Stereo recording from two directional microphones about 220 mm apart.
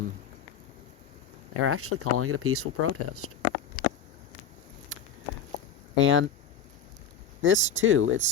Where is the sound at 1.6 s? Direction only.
80° right.